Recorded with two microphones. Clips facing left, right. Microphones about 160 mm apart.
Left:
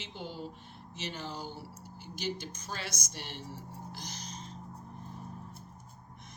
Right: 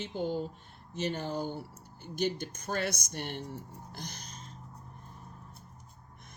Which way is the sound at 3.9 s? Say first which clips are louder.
Left 1 dB; 55° right (ahead or behind).